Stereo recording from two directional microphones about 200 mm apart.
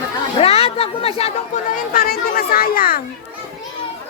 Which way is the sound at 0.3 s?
30° left (ahead or behind).